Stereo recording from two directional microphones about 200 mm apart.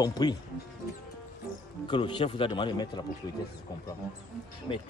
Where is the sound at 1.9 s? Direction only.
25° left (ahead or behind).